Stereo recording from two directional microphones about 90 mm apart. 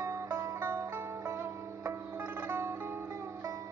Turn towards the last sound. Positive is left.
turn(degrees=-25)  # may be behind; listen again after turning